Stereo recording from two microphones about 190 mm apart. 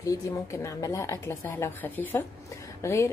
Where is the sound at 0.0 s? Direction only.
15° left (ahead or behind).